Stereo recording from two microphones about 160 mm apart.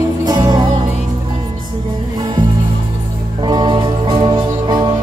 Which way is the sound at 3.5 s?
25° right (ahead or behind).